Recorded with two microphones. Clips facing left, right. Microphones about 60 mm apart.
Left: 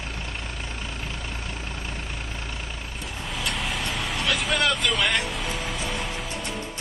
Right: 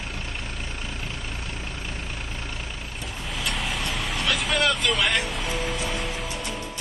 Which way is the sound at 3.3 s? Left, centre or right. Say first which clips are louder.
Even; centre.